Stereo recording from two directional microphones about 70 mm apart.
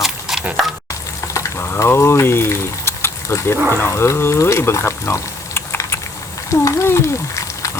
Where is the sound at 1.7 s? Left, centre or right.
Left.